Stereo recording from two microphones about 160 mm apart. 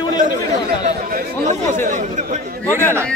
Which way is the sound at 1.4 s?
50° right (ahead or behind).